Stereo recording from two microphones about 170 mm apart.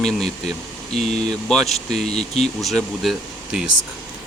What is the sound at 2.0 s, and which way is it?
Speech, 40° left (ahead or behind).